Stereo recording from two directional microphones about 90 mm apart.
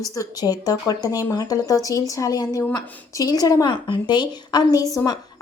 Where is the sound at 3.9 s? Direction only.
55° left (ahead or behind).